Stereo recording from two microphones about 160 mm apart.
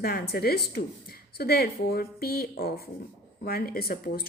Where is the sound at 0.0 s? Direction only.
75° left (ahead or behind).